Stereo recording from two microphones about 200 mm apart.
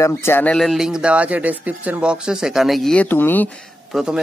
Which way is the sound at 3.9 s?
5° right (ahead or behind).